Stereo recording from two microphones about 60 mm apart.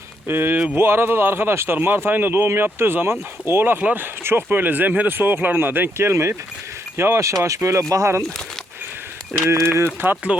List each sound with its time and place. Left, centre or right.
0.3 s a man's voice: right
9.4 s speech: right
9.6 s speech: right
10.3 s speech: right